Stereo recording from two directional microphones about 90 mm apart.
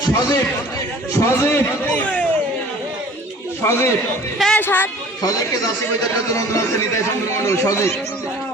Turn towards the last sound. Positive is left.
turn(degrees=30)  # may be behind; listen again after turning